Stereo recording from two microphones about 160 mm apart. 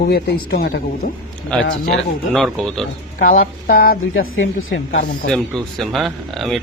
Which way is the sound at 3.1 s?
60° left (ahead or behind).